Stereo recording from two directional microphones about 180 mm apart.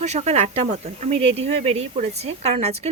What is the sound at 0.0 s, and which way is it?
Speech, 40° right (ahead or behind).